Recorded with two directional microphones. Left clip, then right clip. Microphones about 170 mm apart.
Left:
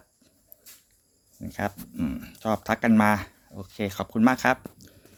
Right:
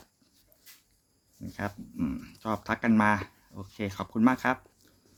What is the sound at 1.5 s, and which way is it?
Speech, 15° left (ahead or behind).